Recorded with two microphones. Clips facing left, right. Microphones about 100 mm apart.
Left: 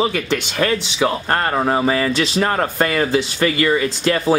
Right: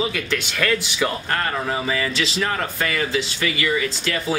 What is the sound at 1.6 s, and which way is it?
Speech, 45° left (ahead or behind).